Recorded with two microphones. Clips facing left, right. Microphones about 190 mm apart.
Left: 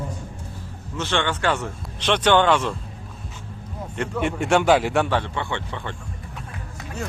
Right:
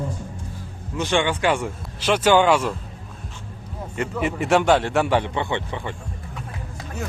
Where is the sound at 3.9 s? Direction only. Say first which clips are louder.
Even; centre (ahead or behind).